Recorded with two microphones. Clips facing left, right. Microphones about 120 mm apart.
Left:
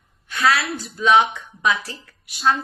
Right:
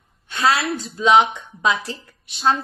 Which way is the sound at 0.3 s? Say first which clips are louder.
Right 1 dB; 25° right (ahead or behind).